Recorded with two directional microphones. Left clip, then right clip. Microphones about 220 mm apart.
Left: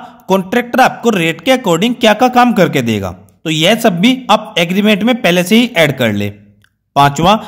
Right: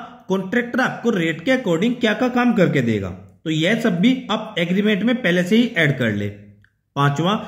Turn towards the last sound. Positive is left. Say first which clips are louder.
# left 11 dB
turn(degrees=45)  # may be behind; listen again after turning